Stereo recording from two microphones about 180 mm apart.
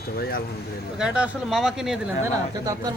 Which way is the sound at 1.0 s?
5° right (ahead or behind).